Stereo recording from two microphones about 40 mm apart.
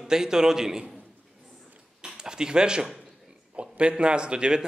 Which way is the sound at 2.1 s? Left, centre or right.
Centre.